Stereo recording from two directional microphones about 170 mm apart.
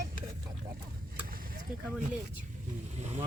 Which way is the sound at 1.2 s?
55° right (ahead or behind).